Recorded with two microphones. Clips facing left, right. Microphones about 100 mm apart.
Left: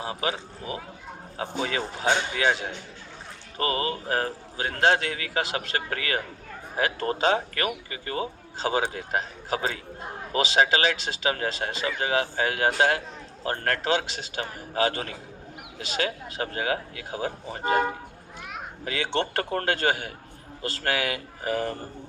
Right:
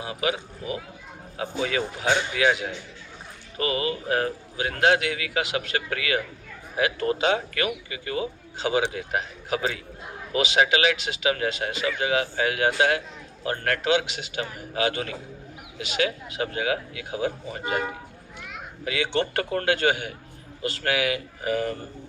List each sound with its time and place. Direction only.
0.0 s speech: 35° left (ahead or behind)